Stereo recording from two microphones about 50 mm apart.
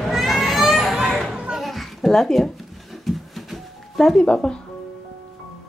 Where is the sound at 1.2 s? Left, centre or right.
Centre.